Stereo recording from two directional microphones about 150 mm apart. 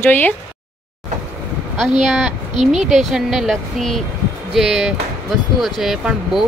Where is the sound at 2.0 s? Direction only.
5° right (ahead or behind).